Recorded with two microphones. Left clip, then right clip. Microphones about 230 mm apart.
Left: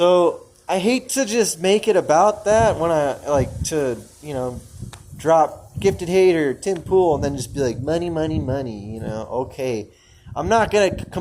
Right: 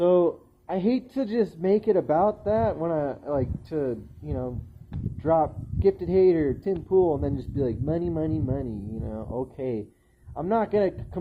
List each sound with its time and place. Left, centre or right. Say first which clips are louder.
0.0 s speech: left 6 dB; centre